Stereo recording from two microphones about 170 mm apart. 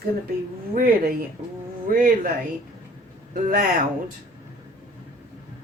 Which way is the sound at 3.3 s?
50° right (ahead or behind).